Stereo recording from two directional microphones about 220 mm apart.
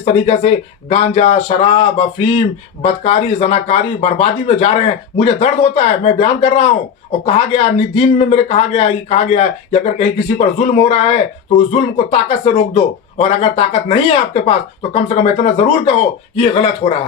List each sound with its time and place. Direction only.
0.0 s speech: 30° left (ahead or behind)